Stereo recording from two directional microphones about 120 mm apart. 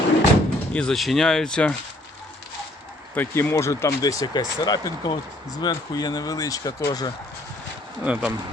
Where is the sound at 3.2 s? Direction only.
20° left (ahead or behind).